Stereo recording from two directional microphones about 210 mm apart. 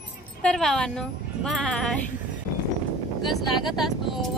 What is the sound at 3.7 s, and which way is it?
Speech, centre (ahead or behind).